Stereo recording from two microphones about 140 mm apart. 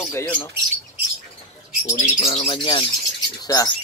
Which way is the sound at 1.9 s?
50° left (ahead or behind).